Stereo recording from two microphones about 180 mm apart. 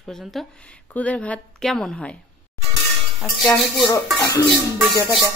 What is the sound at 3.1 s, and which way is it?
Speech, centre (ahead or behind).